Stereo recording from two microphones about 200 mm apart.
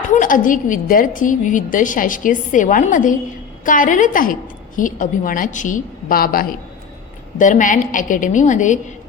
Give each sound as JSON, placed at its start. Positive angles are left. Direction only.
{"t": 0.1, "sound": "a woman's voice", "side_deg": 40}